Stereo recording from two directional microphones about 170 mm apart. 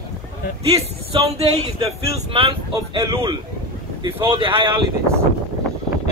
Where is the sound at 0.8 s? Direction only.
35° right (ahead or behind).